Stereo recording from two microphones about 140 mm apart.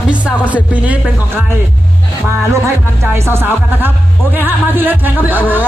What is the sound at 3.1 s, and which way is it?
Speech, 15° right (ahead or behind).